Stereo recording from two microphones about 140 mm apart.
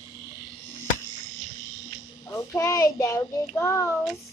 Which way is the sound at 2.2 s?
20° left (ahead or behind).